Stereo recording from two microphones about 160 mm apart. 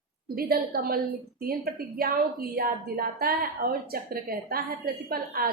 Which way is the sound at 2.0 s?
65° right (ahead or behind).